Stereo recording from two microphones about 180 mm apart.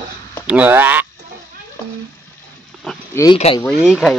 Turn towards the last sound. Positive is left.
turn(degrees=0)  # may be behind; listen again after turning